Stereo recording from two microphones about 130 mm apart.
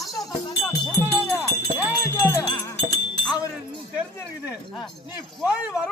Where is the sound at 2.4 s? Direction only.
35° left (ahead or behind).